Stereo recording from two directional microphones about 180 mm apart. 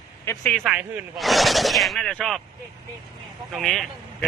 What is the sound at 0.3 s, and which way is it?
Speech, 15° left (ahead or behind).